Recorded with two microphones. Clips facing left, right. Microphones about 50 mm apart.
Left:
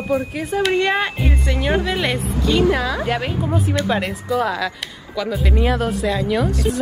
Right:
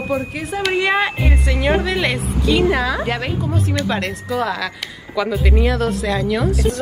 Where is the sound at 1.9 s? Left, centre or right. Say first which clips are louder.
Right 1 dB; centre.